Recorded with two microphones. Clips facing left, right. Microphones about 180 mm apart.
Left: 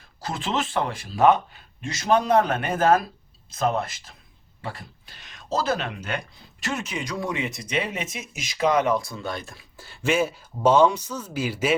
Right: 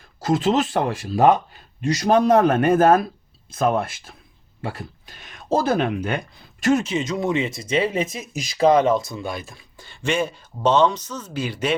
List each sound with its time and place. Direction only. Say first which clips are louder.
0.2 s a man's voice: right 8 dB; 45° right (ahead or behind)
6.8 s speech: right 6 dB; 25° right (ahead or behind); by 11.7 s 5° left (ahead or behind)